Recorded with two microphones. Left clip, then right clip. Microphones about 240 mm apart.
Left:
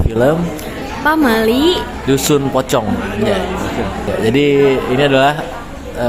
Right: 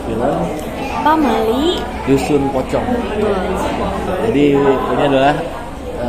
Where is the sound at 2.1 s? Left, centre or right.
Left.